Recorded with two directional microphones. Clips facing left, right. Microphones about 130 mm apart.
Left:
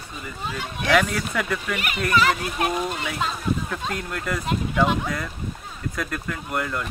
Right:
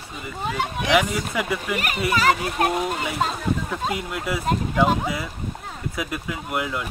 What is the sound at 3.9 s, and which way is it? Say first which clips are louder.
Speech: right 2 dB; 5° right (ahead or behind).